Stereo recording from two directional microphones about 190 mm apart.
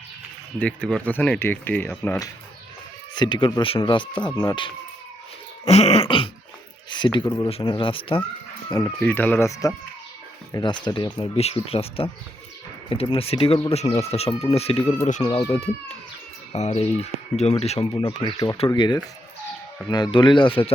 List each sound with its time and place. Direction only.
0.6 s speech: 5° left (ahead or behind); by 4.7 s 20° left (ahead or behind)
5.6 s speech: 35° left (ahead or behind)
9.0 s speech: 10° left (ahead or behind); by 15.4 s 30° left (ahead or behind)
16.5 s speech: 35° left (ahead or behind)